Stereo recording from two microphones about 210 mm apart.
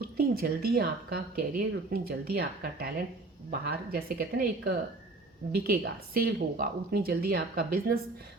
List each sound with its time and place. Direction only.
0.2 s a woman's voice: 45° right (ahead or behind)